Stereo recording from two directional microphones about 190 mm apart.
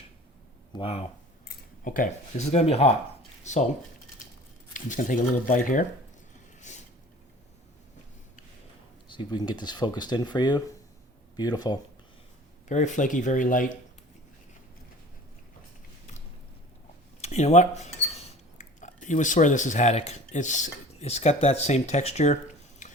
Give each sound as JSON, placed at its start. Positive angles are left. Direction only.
{"t": 0.8, "sound": "speech", "side_deg": 30}
{"t": 1.5, "sound": "speech", "side_deg": 45}
{"t": 4.7, "sound": "speech", "side_deg": 40}
{"t": 6.7, "sound": "a sound", "side_deg": 40}
{"t": 9.0, "sound": "speech", "side_deg": 25}
{"t": 12.6, "sound": "speech", "side_deg": 40}
{"t": 17.2, "sound": "speech", "side_deg": 35}
{"t": 22.8, "sound": "tick-tock", "side_deg": 40}